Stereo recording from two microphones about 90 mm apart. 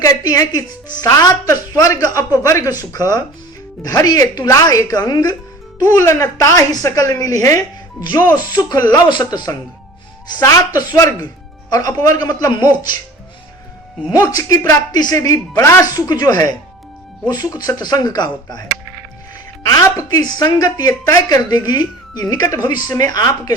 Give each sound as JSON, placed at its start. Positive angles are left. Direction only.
{"t": 0.0, "sound": "a woman's voice", "side_deg": 40}
{"t": 6.0, "sound": "a woman's voice", "side_deg": 35}
{"t": 8.9, "sound": "speech", "side_deg": 55}
{"t": 10.8, "sound": "a woman's voice", "side_deg": 40}
{"t": 14.2, "sound": "a woman's voice", "side_deg": 40}
{"t": 15.9, "sound": "speech", "side_deg": 50}
{"t": 19.6, "sound": "speech", "side_deg": 40}